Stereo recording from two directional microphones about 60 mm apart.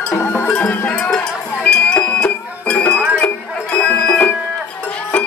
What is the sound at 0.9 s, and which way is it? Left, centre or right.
Music, centre.